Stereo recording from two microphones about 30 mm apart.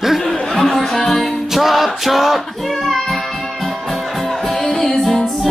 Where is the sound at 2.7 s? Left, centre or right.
Centre.